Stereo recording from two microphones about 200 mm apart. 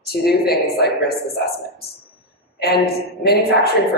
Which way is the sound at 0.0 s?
50° left (ahead or behind).